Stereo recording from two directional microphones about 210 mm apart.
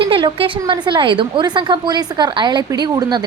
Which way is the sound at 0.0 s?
25° right (ahead or behind).